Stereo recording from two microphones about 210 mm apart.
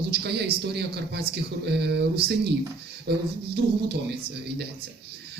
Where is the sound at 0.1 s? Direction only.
50° right (ahead or behind).